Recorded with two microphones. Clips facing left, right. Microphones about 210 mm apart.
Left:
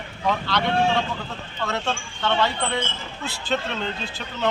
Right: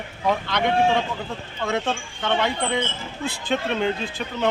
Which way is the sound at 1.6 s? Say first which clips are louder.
Right 2 dB; 15° right (ahead or behind).